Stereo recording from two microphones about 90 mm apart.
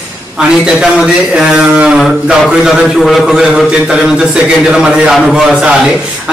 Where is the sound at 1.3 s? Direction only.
10° right (ahead or behind).